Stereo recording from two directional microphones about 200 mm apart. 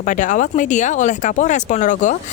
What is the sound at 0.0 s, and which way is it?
Speech, 40° left (ahead or behind).